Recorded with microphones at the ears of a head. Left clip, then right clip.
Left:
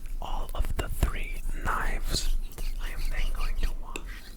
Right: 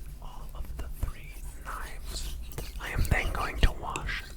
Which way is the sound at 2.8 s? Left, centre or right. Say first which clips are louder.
Right 9 dB; right.